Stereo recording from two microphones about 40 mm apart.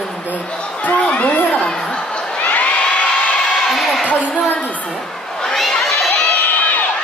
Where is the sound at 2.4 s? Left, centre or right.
Left.